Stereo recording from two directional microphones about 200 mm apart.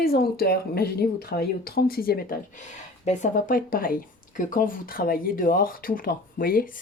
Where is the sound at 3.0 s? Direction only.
35° left (ahead or behind).